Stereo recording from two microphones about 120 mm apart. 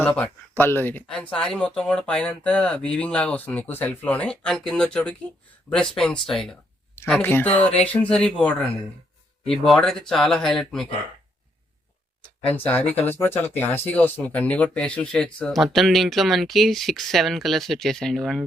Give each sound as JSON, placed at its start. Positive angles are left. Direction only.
{"t": 0.0, "sound": "speech", "side_deg": 15}
{"t": 7.2, "sound": "speech", "side_deg": 20}
{"t": 12.5, "sound": "speech", "side_deg": 15}